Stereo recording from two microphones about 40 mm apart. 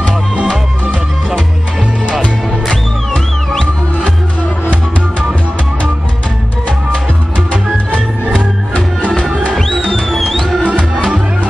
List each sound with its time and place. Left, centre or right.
8.7 s music: left
9.8 s music: centre